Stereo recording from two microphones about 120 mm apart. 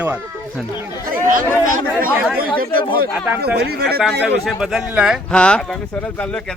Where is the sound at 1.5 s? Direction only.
20° left (ahead or behind).